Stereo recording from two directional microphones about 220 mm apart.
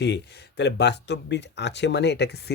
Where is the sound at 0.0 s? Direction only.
50° left (ahead or behind).